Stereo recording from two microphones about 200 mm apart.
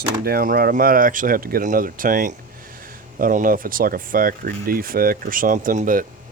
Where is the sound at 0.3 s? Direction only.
45° right (ahead or behind).